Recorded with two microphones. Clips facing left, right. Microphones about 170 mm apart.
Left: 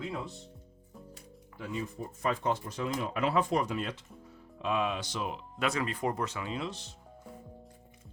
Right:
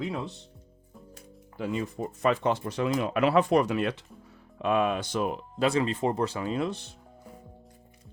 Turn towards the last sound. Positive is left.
turn(degrees=-55)  # may be behind; listen again after turning